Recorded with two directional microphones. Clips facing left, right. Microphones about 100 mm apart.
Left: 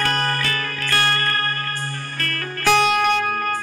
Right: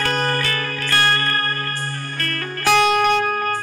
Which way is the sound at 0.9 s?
10° right (ahead or behind).